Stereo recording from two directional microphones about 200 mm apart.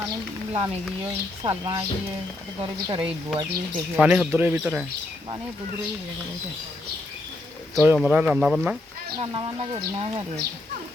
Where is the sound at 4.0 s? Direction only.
5° right (ahead or behind).